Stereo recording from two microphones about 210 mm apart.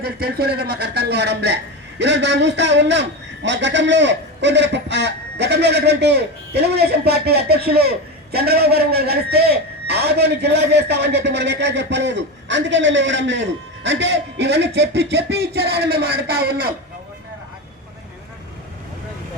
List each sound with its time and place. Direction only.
0.0 s a man's voice: 45° right (ahead or behind)